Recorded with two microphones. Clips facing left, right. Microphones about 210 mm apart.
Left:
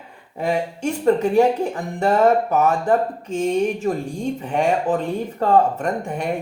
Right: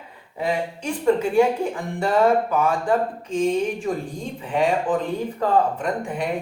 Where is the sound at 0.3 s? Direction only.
45° left (ahead or behind).